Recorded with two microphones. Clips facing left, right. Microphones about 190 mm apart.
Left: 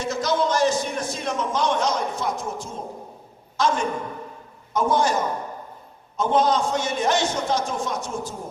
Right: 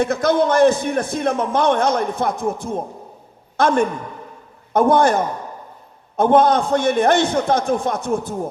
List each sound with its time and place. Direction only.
0.0 s a man's voice: 55° right (ahead or behind)